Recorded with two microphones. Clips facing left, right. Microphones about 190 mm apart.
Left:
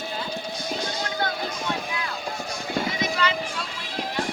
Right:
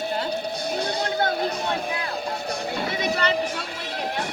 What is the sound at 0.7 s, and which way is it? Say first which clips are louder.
Music: right 3 dB; 60° right (ahead or behind).